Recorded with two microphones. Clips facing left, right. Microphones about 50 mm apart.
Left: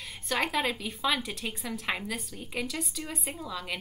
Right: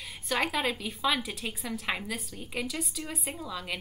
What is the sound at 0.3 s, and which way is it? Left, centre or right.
A woman's voice, centre.